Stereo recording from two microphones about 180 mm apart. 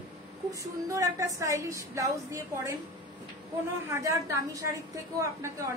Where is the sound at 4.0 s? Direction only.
15° right (ahead or behind).